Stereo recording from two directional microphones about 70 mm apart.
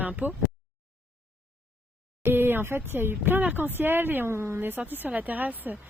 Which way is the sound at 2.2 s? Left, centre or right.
Right.